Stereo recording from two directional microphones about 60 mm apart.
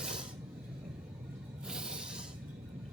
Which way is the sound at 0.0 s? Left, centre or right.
Centre.